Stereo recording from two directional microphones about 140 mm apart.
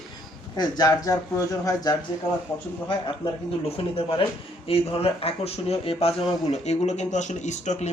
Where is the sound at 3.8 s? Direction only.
40° left (ahead or behind).